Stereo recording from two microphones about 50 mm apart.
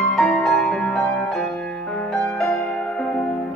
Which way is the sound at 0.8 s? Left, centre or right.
Left.